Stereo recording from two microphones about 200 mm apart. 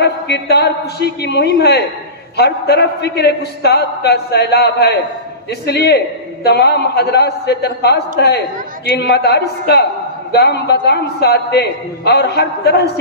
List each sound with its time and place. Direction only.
0.0 s a man's voice: 55° left (ahead or behind)